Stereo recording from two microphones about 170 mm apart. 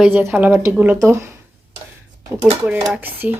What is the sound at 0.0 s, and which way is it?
A woman's voice, 5° right (ahead or behind).